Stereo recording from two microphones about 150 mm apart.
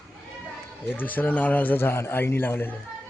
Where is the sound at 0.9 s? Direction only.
10° left (ahead or behind).